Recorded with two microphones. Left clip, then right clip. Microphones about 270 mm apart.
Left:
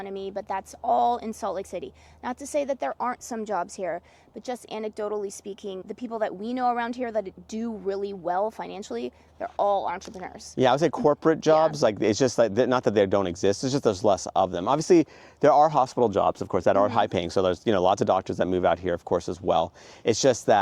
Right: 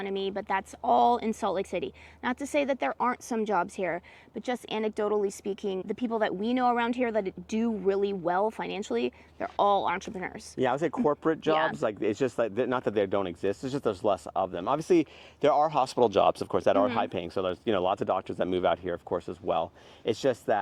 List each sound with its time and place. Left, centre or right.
0.0 s speech: centre
2.3 s speech: right
4.4 s speech: right
10.6 s speech: left
15.8 s speech: left